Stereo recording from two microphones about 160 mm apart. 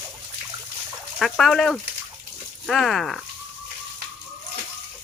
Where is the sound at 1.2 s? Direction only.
Centre (ahead or behind).